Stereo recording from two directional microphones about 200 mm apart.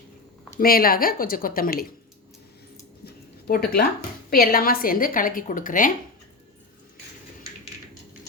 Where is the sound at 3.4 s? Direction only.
50° left (ahead or behind).